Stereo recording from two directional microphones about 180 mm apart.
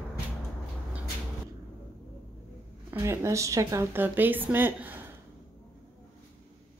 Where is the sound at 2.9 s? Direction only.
15° right (ahead or behind).